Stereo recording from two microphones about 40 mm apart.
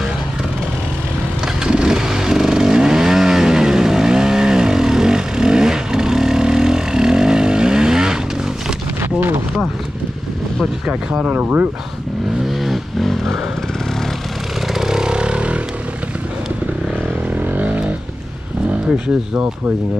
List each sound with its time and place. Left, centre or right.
1.6 s vehicle: centre
11.1 s speech: right
12.6 s vehicle: centre
14.7 s vehicle: centre; by 15.6 s right
17.4 s vehicle: right